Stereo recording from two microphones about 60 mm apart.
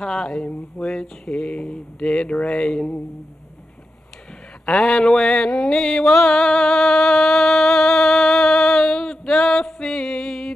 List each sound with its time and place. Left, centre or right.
0.0 s speech: centre
4.6 s mantra: centre